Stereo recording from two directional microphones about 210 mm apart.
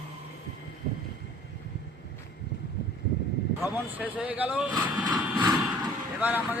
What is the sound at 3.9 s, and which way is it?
Speech, 5° right (ahead or behind).